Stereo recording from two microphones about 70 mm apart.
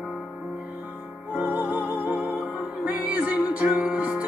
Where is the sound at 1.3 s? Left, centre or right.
Centre.